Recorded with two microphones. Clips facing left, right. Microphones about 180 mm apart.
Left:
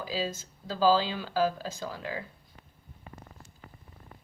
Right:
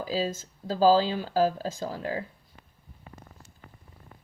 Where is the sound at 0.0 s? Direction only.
40° right (ahead or behind).